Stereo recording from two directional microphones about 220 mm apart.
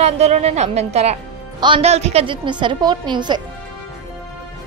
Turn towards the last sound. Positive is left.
turn(degrees=-20)  # may be behind; listen again after turning